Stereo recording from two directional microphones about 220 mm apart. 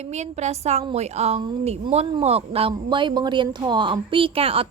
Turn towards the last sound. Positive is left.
turn(degrees=-25)  # may be behind; listen again after turning